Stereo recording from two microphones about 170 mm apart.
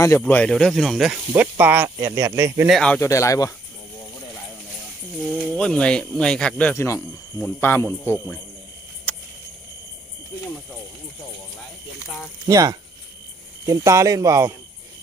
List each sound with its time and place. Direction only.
0.0 s speech: 15° left (ahead or behind)
1.3 s speech: 10° right (ahead or behind)
2.6 s speech: 5° left (ahead or behind)
3.0 s speech: 20° left (ahead or behind)
5.1 s speech: centre (ahead or behind)
9.1 s a sound: 10° left (ahead or behind)
12.5 s speech: 20° right (ahead or behind)